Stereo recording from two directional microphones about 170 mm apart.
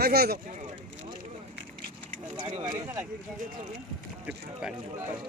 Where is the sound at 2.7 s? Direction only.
15° right (ahead or behind).